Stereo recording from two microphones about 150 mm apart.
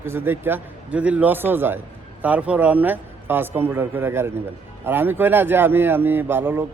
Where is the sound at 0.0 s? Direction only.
15° right (ahead or behind).